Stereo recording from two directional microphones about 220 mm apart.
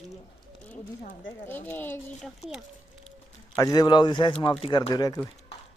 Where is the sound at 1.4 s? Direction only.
10° left (ahead or behind).